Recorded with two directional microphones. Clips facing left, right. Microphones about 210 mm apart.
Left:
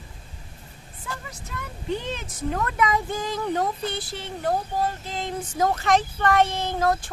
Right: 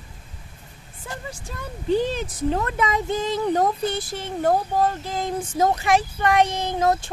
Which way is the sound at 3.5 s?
45° right (ahead or behind).